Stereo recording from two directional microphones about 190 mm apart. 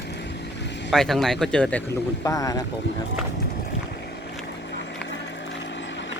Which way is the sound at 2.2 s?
20° left (ahead or behind).